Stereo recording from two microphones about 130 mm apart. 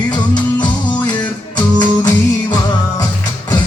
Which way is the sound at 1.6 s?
30° left (ahead or behind).